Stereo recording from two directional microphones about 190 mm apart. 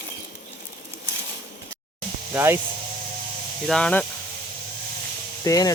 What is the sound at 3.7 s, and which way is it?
Speech, 5° left (ahead or behind).